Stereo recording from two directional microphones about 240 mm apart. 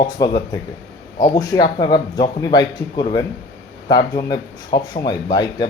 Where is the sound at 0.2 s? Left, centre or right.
Centre.